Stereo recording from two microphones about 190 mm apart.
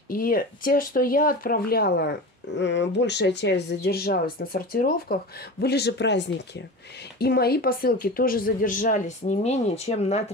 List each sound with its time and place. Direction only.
0.1 s speech: 50° left (ahead or behind); by 6.6 s 65° left (ahead or behind)
7.2 s speech: 55° left (ahead or behind); by 10.3 s 35° left (ahead or behind)